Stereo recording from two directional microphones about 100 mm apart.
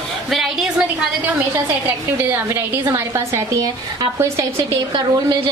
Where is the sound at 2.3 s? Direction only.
20° right (ahead or behind).